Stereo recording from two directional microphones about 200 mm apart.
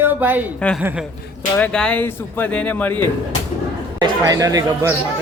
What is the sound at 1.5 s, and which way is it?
Speech, 5° left (ahead or behind).